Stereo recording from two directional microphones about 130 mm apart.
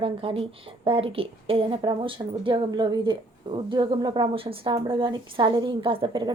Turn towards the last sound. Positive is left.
turn(degrees=-35)  # may be behind; listen again after turning